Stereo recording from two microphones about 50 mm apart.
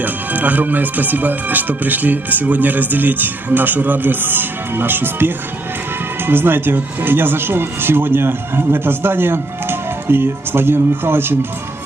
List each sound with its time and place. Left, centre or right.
0.0 s speech: right